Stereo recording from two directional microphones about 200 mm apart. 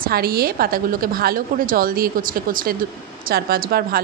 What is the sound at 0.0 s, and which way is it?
Speech, 50° right (ahead or behind).